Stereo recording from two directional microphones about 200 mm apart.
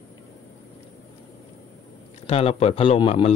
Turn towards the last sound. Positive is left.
turn(degrees=30)  # may be behind; listen again after turning